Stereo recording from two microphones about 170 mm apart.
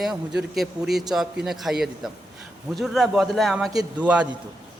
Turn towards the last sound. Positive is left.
turn(degrees=-10)  # may be behind; listen again after turning